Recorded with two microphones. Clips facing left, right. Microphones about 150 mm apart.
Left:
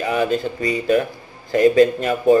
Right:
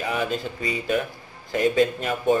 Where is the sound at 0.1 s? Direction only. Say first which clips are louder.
Left 8 dB; 50° left (ahead or behind).